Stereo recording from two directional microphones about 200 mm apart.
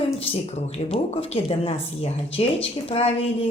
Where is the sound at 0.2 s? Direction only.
30° left (ahead or behind).